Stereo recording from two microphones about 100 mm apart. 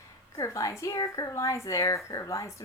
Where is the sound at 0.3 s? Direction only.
30° left (ahead or behind).